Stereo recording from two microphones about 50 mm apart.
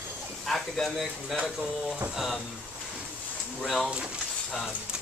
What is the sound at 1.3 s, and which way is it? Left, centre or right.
Speech, centre.